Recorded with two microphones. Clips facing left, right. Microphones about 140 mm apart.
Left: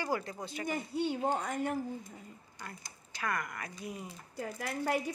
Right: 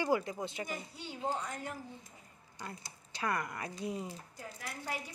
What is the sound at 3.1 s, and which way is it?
Speech, 30° right (ahead or behind).